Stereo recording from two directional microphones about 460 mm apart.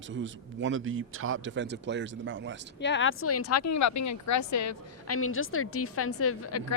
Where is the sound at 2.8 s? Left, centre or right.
Left.